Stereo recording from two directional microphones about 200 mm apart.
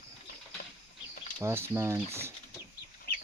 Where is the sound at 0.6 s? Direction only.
50° left (ahead or behind).